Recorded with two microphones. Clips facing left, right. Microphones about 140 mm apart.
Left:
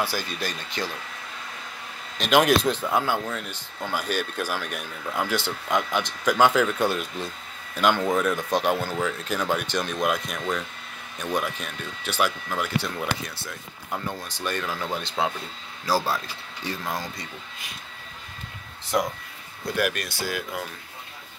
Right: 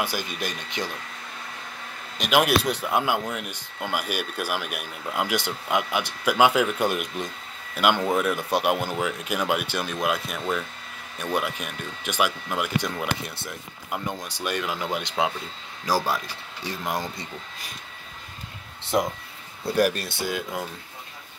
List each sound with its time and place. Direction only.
0.0 s speech: 20° right (ahead or behind)
2.1 s a man's voice: 10° right (ahead or behind)
18.9 s speech: 25° right (ahead or behind)